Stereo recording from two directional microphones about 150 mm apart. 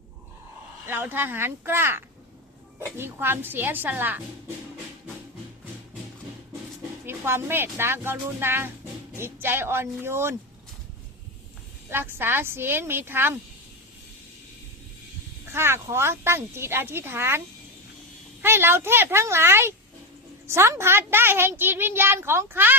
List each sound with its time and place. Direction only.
0.9 s a woman's voice: 15° right (ahead or behind)
7.0 s a woman's voice: 15° right (ahead or behind)
11.9 s a woman's voice: 15° right (ahead or behind)
15.5 s a woman's voice: 15° right (ahead or behind)
18.4 s a woman's voice: 15° right (ahead or behind)